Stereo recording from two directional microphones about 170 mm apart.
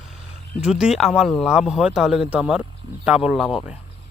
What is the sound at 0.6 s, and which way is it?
Speech, 5° right (ahead or behind).